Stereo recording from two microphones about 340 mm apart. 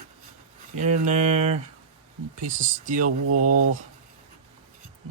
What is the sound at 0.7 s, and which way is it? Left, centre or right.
Speech, right.